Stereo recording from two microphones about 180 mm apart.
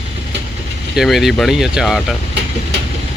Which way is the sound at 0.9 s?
Centre (ahead or behind).